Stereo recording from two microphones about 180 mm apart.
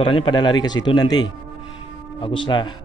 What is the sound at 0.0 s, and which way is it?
A man's voice, 25° left (ahead or behind).